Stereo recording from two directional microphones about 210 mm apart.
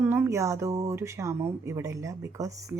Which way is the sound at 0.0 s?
10° right (ahead or behind).